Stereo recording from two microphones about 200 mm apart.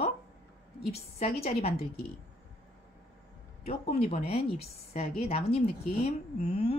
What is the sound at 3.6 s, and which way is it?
A woman's voice, 30° left (ahead or behind).